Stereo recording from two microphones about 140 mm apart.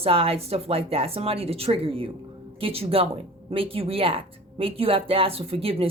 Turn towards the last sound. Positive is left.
turn(degrees=-45)  # may be behind; listen again after turning